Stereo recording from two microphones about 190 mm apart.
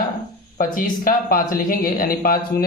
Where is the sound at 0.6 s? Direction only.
50° left (ahead or behind).